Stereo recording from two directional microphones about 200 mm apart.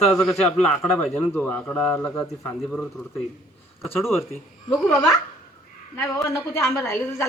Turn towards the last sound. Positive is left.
turn(degrees=15)  # may be behind; listen again after turning